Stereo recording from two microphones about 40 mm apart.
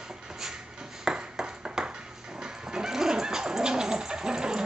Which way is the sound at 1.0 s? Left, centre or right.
Centre.